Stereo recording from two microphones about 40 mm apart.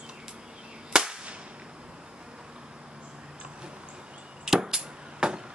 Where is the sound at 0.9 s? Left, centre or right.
Centre.